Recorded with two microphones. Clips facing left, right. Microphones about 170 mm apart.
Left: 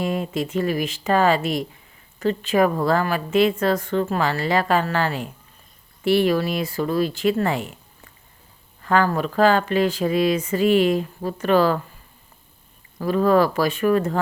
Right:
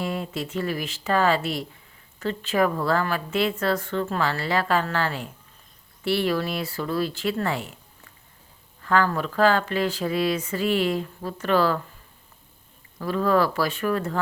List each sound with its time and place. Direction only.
0.0 s speech: 15° left (ahead or behind)
8.8 s a sound: 20° left (ahead or behind)
9.1 s speech: 20° left (ahead or behind)
13.1 s speech: 15° left (ahead or behind)